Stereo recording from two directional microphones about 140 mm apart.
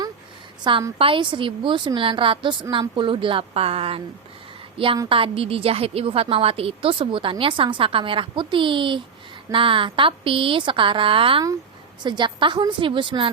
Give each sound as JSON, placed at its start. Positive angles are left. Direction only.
{"t": 0.6, "sound": "a woman's voice", "side_deg": -30}
{"t": 5.0, "sound": "a woman's voice", "side_deg": -40}